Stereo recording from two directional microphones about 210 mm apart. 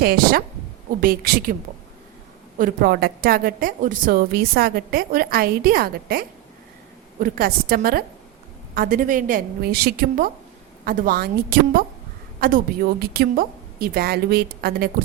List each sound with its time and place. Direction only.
0.0 s a woman's voice: 45° right (ahead or behind)
2.6 s a woman's voice: 45° right (ahead or behind)